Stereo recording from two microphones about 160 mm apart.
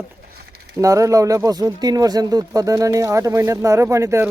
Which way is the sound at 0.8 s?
20° right (ahead or behind).